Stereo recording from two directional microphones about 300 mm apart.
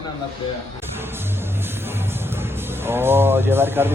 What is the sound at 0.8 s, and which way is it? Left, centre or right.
Music, centre.